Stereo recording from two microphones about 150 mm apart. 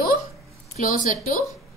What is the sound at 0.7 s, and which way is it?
Speech, 65° left (ahead or behind).